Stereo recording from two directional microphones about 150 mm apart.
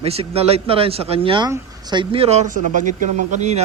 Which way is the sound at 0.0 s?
40° right (ahead or behind).